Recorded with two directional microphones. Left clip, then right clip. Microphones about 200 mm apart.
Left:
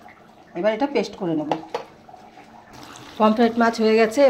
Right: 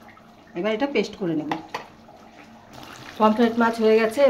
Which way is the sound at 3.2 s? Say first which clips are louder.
Left 1 dB; 15° left (ahead or behind).